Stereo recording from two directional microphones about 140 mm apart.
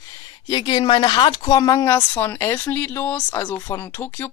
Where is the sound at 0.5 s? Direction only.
30° left (ahead or behind).